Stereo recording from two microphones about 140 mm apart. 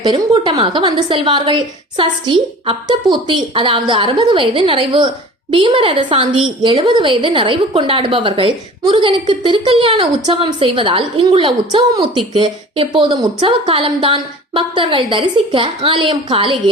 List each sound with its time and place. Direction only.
0.0 s a woman's voice: 35° right (ahead or behind)